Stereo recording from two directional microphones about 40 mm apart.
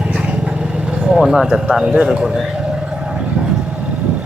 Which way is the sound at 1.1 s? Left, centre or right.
Centre.